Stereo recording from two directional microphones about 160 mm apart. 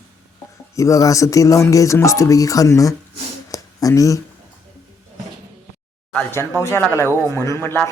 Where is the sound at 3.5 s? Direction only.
20° left (ahead or behind).